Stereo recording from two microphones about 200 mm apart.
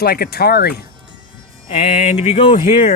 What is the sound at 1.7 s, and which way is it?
Speech, 30° left (ahead or behind).